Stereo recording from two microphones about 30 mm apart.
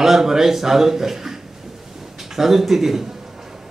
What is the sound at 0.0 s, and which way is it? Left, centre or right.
A man's voice, centre.